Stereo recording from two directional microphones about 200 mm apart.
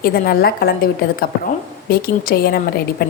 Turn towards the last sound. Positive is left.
turn(degrees=50)  # may be behind; listen again after turning